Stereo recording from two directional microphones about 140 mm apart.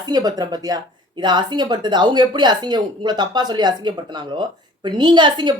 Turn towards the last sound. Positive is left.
turn(degrees=-35)  # may be behind; listen again after turning